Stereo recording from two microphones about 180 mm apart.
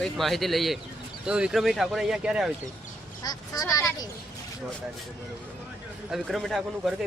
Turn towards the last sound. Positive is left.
turn(degrees=0)  # may be behind; listen again after turning